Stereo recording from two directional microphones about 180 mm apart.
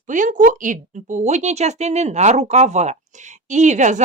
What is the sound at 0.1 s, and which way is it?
Speech, 45° right (ahead or behind).